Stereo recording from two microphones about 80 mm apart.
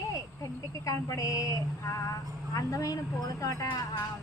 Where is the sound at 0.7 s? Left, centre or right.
Left.